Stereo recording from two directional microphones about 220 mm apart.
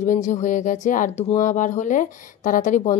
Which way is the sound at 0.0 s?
35° left (ahead or behind).